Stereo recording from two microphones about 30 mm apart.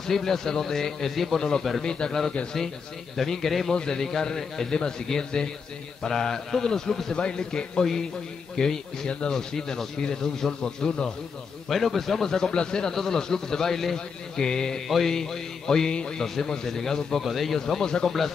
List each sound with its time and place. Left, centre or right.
0.0 s speech: centre
1.1 s a man's voice: centre
1.8 s speech: left
3.3 s speech: centre
3.7 s speech: left
7.2 s speech: left
11.7 s speech: centre
13.9 s speech: left
15.9 s speech: left
16.2 s speech: centre
17.2 s a man's voice: centre
17.8 s speech: left